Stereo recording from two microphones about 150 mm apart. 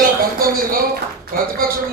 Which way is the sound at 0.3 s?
75° right (ahead or behind).